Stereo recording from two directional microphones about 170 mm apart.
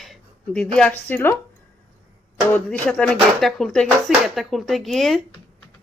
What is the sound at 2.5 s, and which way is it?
Speech, 10° left (ahead or behind).